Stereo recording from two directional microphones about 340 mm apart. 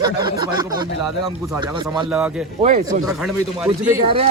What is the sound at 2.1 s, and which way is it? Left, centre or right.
Speech, centre.